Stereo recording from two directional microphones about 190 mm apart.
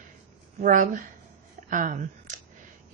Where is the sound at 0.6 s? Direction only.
45° right (ahead or behind).